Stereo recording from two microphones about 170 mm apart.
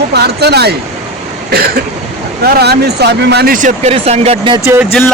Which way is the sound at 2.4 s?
70° right (ahead or behind).